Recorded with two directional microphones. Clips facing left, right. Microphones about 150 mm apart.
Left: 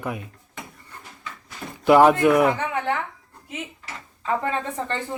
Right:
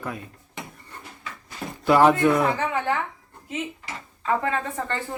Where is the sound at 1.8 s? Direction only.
15° left (ahead or behind).